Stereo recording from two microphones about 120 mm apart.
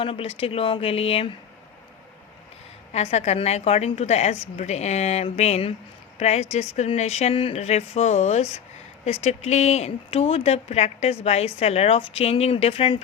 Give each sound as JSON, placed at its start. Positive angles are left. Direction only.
{"t": 0.0, "sound": "speech", "side_deg": 50}
{"t": 2.9, "sound": "a woman's voice", "side_deg": 65}